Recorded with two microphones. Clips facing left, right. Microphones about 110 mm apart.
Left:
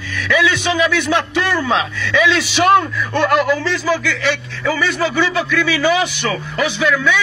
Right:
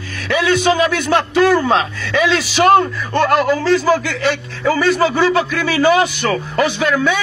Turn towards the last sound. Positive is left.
turn(degrees=-45)  # may be behind; listen again after turning